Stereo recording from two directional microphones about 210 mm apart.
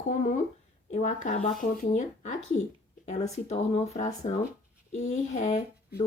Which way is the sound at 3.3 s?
30° left (ahead or behind).